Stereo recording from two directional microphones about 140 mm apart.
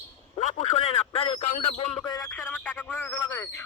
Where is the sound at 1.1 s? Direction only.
45° left (ahead or behind).